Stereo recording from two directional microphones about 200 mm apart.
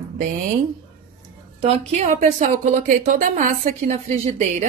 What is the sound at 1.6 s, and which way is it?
A woman's voice, 30° right (ahead or behind).